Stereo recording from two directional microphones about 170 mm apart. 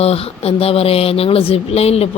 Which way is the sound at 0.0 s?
35° left (ahead or behind).